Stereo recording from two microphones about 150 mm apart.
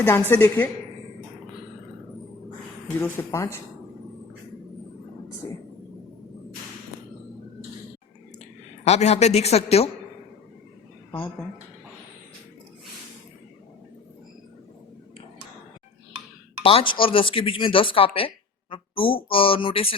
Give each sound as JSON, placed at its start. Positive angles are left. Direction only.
{"t": 0.0, "sound": "a woman's voice", "side_deg": 15}
{"t": 3.0, "sound": "a woman's voice", "side_deg": 15}
{"t": 8.8, "sound": "a woman's voice", "side_deg": 45}
{"t": 16.6, "sound": "speech", "side_deg": 35}